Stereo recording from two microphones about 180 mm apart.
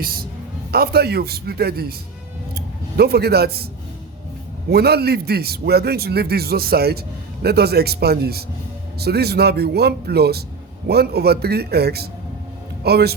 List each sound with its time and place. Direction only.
0.0 s a man's voice: 55° right (ahead or behind)
3.0 s a man's voice: 60° right (ahead or behind)
4.7 s a man's voice: 60° right (ahead or behind)